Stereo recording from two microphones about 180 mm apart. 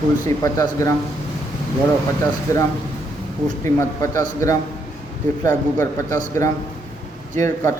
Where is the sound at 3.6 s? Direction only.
15° left (ahead or behind).